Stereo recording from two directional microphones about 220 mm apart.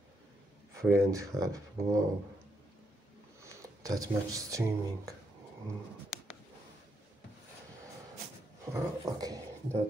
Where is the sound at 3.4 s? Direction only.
15° right (ahead or behind).